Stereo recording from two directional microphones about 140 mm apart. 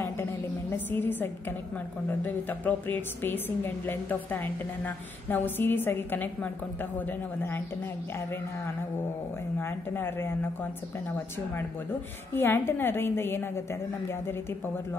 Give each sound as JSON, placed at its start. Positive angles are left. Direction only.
{"t": 0.0, "sound": "a sound", "side_deg": 15}
{"t": 2.2, "sound": "a woman's voice", "side_deg": 15}
{"t": 9.6, "sound": "a woman's voice", "side_deg": 15}